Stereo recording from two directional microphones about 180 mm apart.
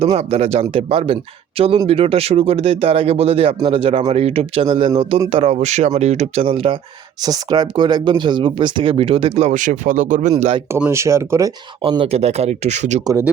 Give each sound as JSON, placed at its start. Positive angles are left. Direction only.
{"t": 0.0, "sound": "speech", "side_deg": -35}
{"t": 10.3, "sound": "speech", "side_deg": -30}
{"t": 10.7, "sound": "speech", "side_deg": -10}
{"t": 11.8, "sound": "speech", "side_deg": -30}